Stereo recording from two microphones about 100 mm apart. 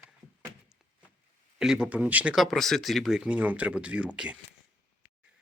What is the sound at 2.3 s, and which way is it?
Speech, centre (ahead or behind).